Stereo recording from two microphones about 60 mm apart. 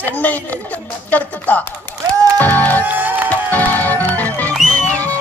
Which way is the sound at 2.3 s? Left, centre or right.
Left.